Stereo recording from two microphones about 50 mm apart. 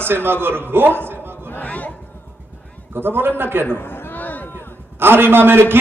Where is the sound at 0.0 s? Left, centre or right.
Right.